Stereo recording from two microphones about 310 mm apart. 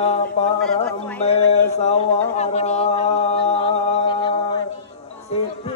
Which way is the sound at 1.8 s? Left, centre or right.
Left.